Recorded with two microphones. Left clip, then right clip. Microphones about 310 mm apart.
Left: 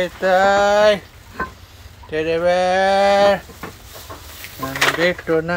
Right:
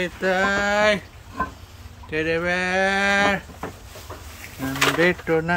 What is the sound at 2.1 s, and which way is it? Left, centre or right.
Speech, centre.